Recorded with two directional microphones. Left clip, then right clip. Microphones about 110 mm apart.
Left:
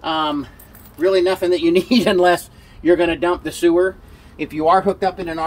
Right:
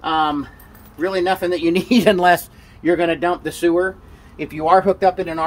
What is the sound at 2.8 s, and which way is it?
Speech, 25° right (ahead or behind).